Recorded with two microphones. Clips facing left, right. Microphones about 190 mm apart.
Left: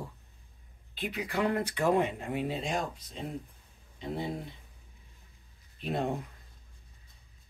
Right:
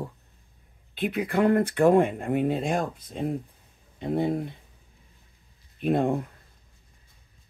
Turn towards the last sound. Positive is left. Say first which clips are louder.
# right 8 dB
turn(degrees=-55)  # may be behind; listen again after turning